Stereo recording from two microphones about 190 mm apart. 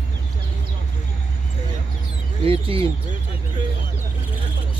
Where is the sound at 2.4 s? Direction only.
30° right (ahead or behind).